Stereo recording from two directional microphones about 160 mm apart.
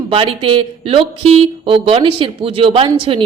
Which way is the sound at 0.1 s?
35° right (ahead or behind).